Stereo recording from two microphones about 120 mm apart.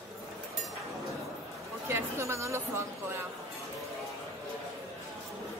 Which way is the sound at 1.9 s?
20° right (ahead or behind).